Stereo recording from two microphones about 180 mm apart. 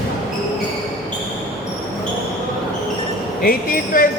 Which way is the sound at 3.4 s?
50° left (ahead or behind).